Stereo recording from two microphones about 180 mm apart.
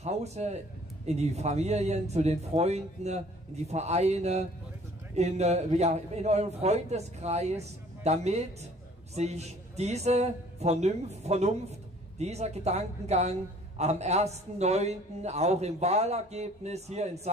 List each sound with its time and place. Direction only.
0.0 s a man's voice: 40° right (ahead or behind)